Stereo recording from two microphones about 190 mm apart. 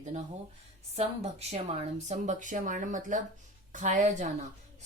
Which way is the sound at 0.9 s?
35° right (ahead or behind).